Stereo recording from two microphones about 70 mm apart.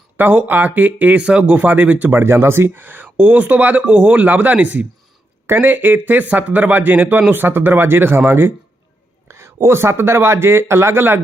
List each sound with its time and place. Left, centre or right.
0.2 s speech: right
2.2 s a man's voice: right